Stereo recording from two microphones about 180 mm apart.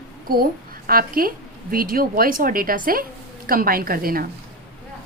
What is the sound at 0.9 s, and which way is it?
A woman's voice, 55° right (ahead or behind).